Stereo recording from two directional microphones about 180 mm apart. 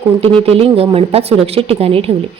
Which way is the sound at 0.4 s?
30° right (ahead or behind).